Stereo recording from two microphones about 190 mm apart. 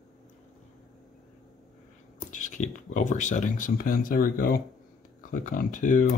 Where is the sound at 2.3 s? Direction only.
40° left (ahead or behind).